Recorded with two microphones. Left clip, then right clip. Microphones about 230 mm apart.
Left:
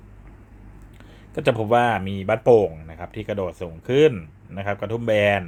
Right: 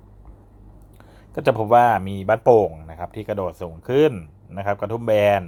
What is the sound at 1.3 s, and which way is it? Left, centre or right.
Speech, centre.